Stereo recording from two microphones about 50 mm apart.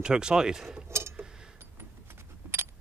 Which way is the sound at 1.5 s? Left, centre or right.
Right.